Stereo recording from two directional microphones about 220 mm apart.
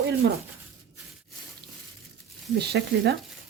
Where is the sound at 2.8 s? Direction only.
50° right (ahead or behind).